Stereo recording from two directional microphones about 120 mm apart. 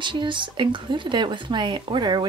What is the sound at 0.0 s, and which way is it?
A woman's voice, 40° right (ahead or behind).